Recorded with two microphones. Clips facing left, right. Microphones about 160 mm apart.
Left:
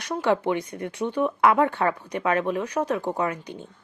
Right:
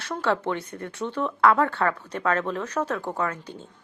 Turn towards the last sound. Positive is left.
turn(degrees=15)  # may be behind; listen again after turning